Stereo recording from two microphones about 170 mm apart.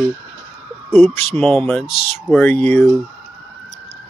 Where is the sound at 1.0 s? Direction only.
Centre (ahead or behind).